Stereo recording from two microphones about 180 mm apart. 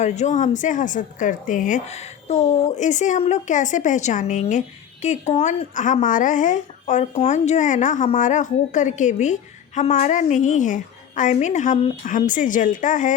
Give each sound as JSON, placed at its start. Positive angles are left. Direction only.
{"t": 0.0, "sound": "speech", "side_deg": 40}